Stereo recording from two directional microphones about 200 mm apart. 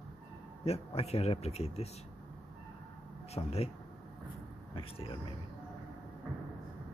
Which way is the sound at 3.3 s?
30° left (ahead or behind).